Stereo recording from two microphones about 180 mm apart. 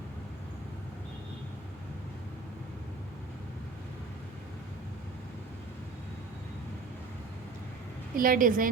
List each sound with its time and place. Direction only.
8.1 s a woman's voice: 50° right (ahead or behind)